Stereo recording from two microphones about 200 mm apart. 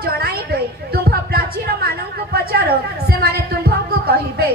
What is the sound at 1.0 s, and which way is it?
Music, 50° right (ahead or behind).